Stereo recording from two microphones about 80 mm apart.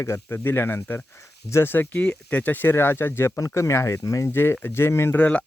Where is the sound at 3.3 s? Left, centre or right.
Left.